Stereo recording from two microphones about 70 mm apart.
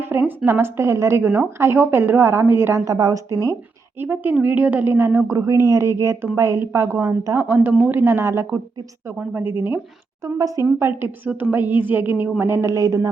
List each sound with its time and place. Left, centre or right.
0.3 s a woman's voice: right
1.2 s speech: right
1.5 s a woman's voice: right
2.8 s speech: right
4.0 s speech: right
5.3 s a woman's voice: right
9.1 s speech: right
10.2 s speech: right
10.8 s a woman's voice: right
12.7 s speech: right